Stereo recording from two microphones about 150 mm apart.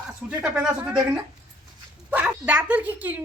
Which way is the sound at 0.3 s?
5° right (ahead or behind).